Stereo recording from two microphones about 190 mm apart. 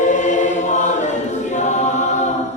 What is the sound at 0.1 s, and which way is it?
Choir, 40° left (ahead or behind).